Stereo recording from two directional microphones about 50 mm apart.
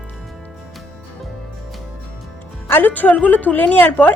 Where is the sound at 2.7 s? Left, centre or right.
Left.